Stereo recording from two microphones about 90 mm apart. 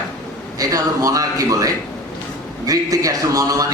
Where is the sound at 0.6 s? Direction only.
40° right (ahead or behind).